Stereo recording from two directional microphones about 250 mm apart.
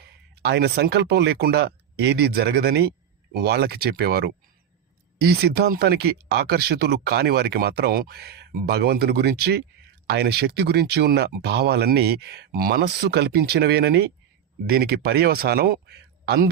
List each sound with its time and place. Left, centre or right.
0.3 s speech: right